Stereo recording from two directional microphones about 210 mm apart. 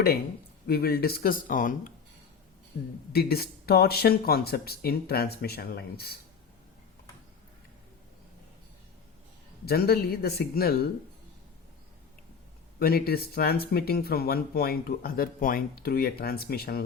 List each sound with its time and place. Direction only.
0.7 s speech: 45° left (ahead or behind)
9.6 s speech: 45° left (ahead or behind)
12.8 s speech: 45° left (ahead or behind)